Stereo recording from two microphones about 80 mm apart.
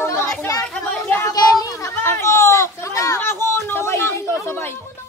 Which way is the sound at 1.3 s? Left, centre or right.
Left.